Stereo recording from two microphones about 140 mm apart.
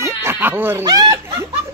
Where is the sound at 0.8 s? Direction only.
30° right (ahead or behind).